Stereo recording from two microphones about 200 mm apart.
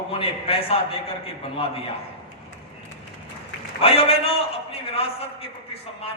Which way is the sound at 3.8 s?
30° left (ahead or behind).